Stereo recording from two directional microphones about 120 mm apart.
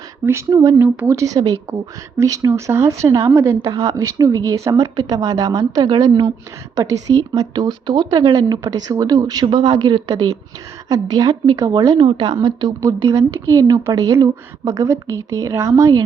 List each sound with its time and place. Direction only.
0.3 s speech: 25° right (ahead or behind)
0.8 s speech: 15° right (ahead or behind)
11.9 s speech: 50° right (ahead or behind)
13.1 s speech: 25° right (ahead or behind)